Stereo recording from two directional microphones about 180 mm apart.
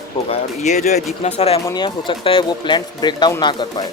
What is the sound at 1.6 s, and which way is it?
Speech, 25° left (ahead or behind).